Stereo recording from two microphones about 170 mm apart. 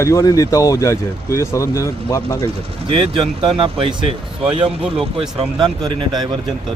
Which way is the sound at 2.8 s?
35° right (ahead or behind).